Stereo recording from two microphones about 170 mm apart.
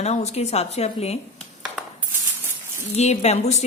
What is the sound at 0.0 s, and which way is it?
Speech, 40° left (ahead or behind).